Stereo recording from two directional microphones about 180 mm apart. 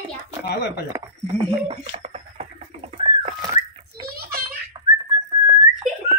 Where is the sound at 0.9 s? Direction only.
25° right (ahead or behind).